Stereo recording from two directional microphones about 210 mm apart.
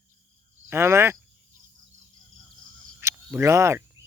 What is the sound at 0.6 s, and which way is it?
Speech, 10° right (ahead or behind).